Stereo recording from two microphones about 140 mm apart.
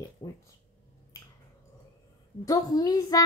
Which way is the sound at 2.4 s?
25° left (ahead or behind).